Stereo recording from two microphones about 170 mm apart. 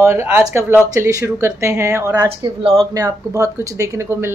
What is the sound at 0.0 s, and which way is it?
A woman's voice, 15° right (ahead or behind).